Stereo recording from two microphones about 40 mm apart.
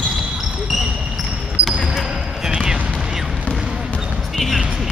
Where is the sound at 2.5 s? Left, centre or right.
Right.